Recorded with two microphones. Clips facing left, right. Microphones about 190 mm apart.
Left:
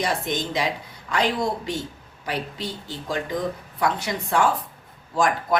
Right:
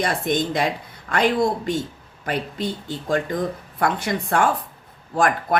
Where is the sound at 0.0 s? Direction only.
55° right (ahead or behind).